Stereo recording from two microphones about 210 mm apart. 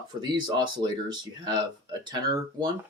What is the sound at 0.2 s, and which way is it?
Speech, 20° right (ahead or behind).